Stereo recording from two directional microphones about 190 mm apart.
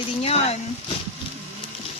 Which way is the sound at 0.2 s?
30° left (ahead or behind).